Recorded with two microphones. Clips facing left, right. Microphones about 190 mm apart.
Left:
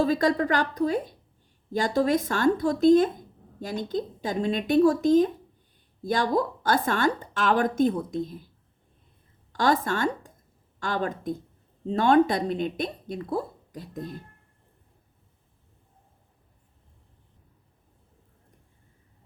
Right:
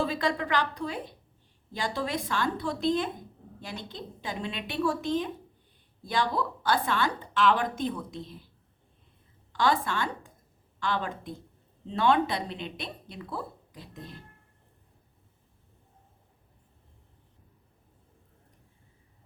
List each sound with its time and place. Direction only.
0.0 s a woman's voice: 45° left (ahead or behind)
9.5 s a woman's voice: 45° left (ahead or behind)